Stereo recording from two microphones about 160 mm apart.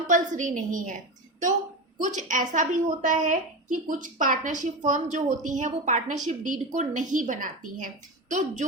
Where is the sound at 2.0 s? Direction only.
50° right (ahead or behind).